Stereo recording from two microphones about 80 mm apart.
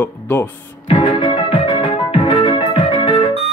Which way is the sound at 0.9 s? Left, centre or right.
Left.